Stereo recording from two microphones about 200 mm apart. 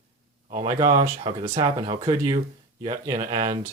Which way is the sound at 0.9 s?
40° right (ahead or behind).